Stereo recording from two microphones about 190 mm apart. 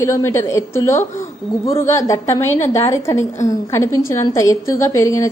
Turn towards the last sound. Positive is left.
turn(degrees=15)  # may be behind; listen again after turning